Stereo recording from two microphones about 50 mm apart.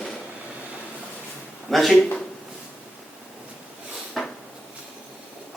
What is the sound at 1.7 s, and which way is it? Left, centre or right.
Speech, centre.